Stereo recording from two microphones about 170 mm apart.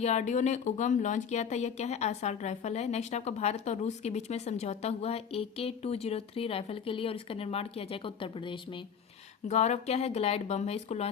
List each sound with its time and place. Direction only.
0.0 s speech: 40° left (ahead or behind)
9.5 s speech: 40° left (ahead or behind)